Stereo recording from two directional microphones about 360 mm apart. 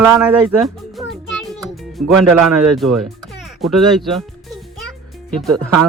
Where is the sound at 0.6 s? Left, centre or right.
Centre.